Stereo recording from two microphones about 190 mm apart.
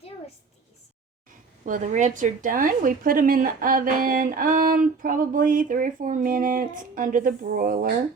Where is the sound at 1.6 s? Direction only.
40° right (ahead or behind).